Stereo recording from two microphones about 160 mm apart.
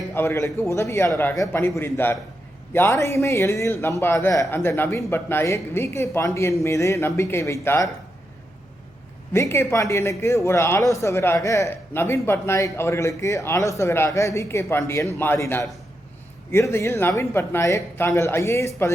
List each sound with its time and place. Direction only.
0.1 s a man's voice: 15° left (ahead or behind)
9.3 s speech: 15° left (ahead or behind)